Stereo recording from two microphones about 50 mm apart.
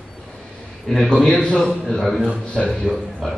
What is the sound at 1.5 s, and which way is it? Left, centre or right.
Speech, centre.